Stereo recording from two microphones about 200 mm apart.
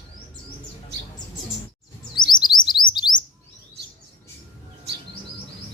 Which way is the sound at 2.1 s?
20° left (ahead or behind).